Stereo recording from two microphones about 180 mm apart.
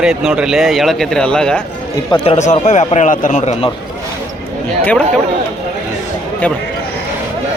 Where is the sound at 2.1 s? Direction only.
30° left (ahead or behind).